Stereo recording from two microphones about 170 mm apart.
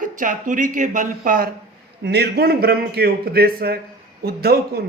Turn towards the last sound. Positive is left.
turn(degrees=-65)  # may be behind; listen again after turning